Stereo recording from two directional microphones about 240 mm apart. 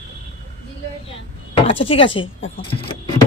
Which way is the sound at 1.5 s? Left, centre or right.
Left.